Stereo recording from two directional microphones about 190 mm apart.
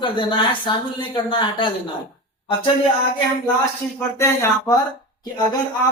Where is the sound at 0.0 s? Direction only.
25° left (ahead or behind).